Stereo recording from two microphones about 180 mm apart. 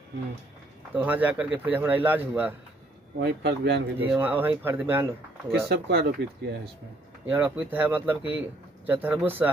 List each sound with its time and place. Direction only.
0.9 s speech: 10° right (ahead or behind)
3.2 s speech: 65° right (ahead or behind)
4.0 s speech: 10° right (ahead or behind)
5.7 s speech: 65° right (ahead or behind)
7.2 s speech: 10° right (ahead or behind)